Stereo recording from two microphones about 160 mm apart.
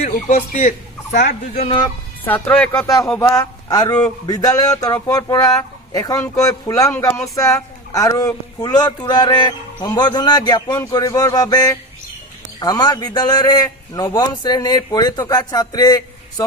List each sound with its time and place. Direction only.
0.0 s a man's voice: 50° left (ahead or behind)
2.2 s speech: 10° left (ahead or behind)
3.2 s speech: 20° left (ahead or behind)